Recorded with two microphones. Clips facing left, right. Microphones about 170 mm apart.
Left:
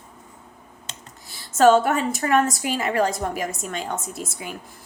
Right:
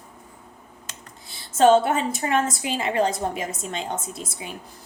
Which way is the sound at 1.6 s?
30° right (ahead or behind).